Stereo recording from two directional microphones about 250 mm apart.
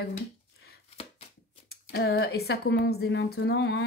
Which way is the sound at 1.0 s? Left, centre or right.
Left.